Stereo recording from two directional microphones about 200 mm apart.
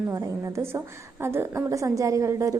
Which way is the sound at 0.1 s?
15° right (ahead or behind).